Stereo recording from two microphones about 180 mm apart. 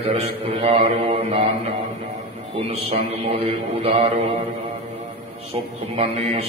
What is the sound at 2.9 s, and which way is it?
Mantra, 30° right (ahead or behind).